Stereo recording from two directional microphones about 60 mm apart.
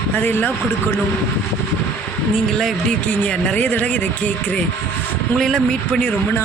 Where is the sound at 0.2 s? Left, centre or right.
Left.